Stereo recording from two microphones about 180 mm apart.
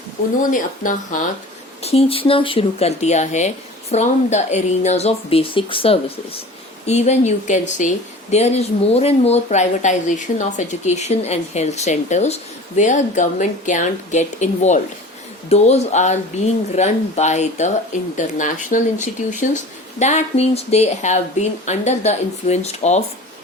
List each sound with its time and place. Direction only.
0.5 s speech: 45° left (ahead or behind)
1.8 s speech: 35° left (ahead or behind)